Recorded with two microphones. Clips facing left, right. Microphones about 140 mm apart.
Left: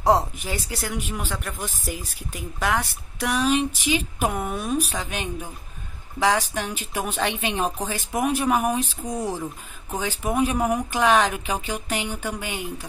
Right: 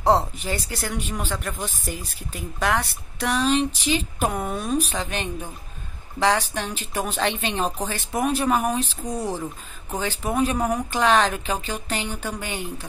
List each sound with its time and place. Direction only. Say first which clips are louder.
0.0 s speech: even; 10° left (ahead or behind)